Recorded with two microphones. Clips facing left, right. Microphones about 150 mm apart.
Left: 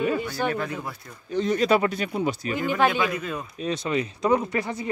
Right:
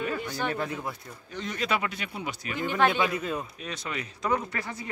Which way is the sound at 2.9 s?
30° right (ahead or behind).